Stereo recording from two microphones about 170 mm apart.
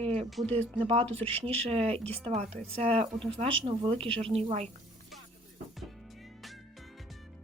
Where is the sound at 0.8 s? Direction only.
30° right (ahead or behind).